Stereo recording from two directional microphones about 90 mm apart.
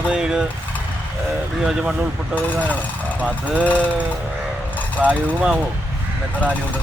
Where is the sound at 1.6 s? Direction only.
10° right (ahead or behind).